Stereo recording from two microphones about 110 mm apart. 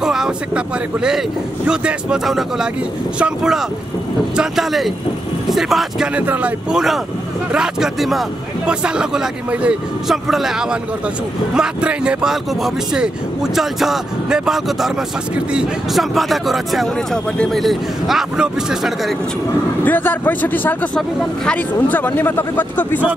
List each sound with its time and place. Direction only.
0.0 s speech: 5° right (ahead or behind)
6.1 s speech: 15° right (ahead or behind)
19.8 s speech: 15° left (ahead or behind)